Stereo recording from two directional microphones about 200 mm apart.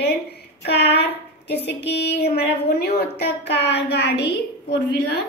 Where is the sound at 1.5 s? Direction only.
55° left (ahead or behind).